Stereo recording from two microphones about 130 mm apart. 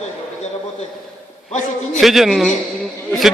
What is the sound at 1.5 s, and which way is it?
Speech, 65° left (ahead or behind).